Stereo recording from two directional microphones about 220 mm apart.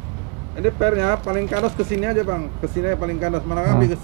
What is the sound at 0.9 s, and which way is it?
Speech, 15° right (ahead or behind).